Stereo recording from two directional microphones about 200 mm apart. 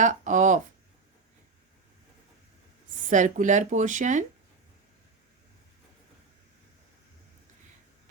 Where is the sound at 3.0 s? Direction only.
40° right (ahead or behind).